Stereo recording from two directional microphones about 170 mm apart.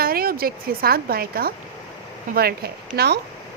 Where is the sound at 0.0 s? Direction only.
60° right (ahead or behind).